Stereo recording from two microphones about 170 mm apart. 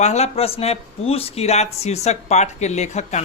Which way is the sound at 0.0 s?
40° left (ahead or behind).